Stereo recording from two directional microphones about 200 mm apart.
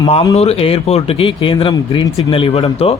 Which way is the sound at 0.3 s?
30° left (ahead or behind).